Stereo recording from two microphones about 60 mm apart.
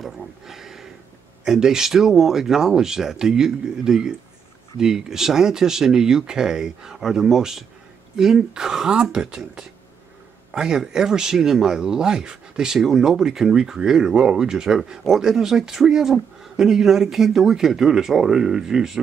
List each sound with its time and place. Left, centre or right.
0.0 s speech: centre